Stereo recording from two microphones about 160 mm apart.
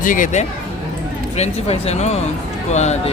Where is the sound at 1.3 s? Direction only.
45° left (ahead or behind).